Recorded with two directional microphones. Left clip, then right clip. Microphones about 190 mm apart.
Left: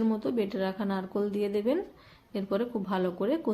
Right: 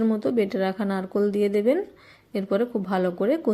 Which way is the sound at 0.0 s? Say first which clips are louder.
Right 6 dB; 25° right (ahead or behind).